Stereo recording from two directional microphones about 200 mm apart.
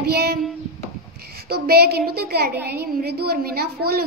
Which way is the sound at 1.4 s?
50° right (ahead or behind).